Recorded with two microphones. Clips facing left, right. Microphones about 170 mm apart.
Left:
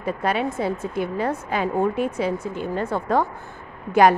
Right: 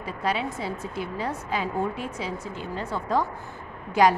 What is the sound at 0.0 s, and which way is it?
A woman's voice, 55° left (ahead or behind).